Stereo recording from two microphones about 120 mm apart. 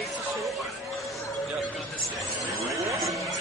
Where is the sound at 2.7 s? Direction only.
25° right (ahead or behind).